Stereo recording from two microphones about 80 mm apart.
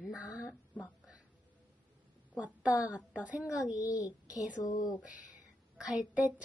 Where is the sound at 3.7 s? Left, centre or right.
Left.